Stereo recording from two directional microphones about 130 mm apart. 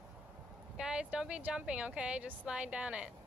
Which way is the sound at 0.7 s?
5° right (ahead or behind).